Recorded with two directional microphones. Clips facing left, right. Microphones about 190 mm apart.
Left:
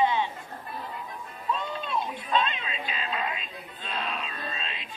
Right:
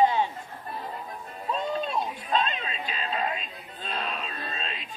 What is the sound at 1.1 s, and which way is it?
Music, 40° right (ahead or behind).